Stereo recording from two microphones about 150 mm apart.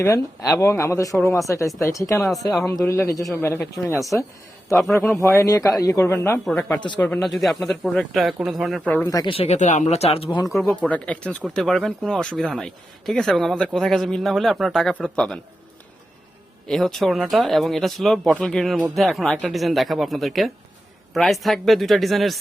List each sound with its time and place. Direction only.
0.6 s a man's voice: 20° left (ahead or behind)
4.7 s speech: centre (ahead or behind)
4.9 s a man's voice: 15° left (ahead or behind); by 8.9 s centre (ahead or behind)
9.0 s speech: 25° left (ahead or behind)
9.3 s speech: 45° left (ahead or behind)
10.2 s speech: 20° left (ahead or behind)
10.6 s a man's voice: 10° left (ahead or behind)
16.6 s speech: 5° left (ahead or behind)